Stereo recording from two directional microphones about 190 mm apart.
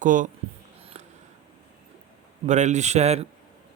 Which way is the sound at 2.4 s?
40° right (ahead or behind).